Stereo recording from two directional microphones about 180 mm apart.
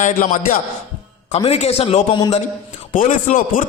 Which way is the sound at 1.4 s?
35° left (ahead or behind).